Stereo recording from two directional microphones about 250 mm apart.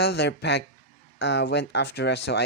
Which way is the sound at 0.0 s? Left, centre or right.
Left.